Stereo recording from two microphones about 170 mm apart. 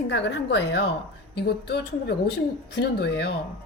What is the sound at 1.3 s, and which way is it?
A woman's voice, 75° left (ahead or behind).